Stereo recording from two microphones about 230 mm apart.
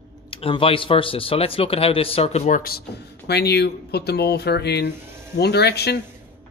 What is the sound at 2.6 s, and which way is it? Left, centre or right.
Speech, left.